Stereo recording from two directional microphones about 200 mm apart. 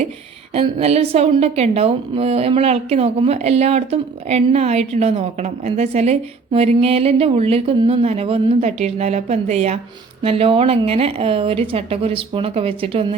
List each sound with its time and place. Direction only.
0.5 s a woman's voice: 30° right (ahead or behind)